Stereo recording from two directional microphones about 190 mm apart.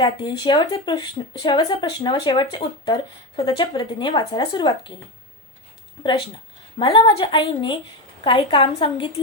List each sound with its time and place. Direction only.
0.0 s speech: 25° left (ahead or behind)
6.0 s a woman's voice: 25° left (ahead or behind)